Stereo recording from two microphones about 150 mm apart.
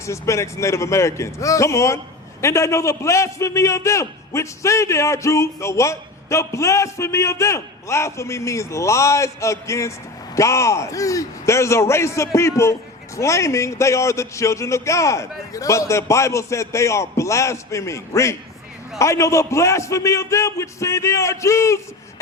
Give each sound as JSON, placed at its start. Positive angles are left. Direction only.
{"t": 0.0, "sound": "a man's voice", "side_deg": 20}